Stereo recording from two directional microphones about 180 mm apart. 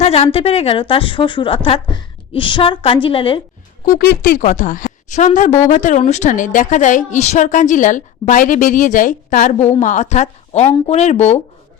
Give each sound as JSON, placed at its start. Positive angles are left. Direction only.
{"t": 0.0, "sound": "a woman's voice", "side_deg": 35}
{"t": 3.8, "sound": "a woman's voice", "side_deg": 50}